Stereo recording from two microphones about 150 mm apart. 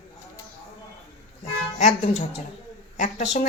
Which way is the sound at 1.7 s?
50° left (ahead or behind).